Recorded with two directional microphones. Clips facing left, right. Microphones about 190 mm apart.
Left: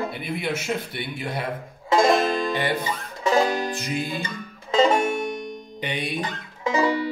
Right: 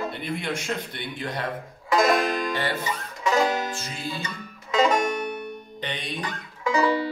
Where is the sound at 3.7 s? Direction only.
15° left (ahead or behind).